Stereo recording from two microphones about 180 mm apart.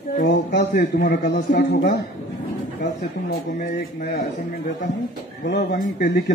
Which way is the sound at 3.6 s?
55° left (ahead or behind).